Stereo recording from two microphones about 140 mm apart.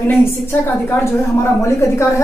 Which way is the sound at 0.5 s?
15° left (ahead or behind).